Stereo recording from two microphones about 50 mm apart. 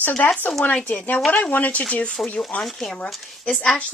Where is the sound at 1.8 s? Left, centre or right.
Centre.